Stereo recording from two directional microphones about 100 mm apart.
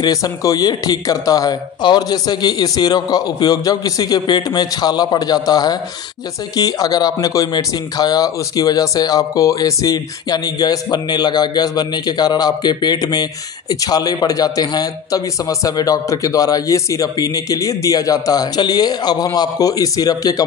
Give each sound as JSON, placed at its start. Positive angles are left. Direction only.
{"t": 0.0, "sound": "speech", "side_deg": 35}